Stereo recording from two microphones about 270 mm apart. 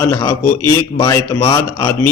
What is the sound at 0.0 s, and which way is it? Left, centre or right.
Speech, centre.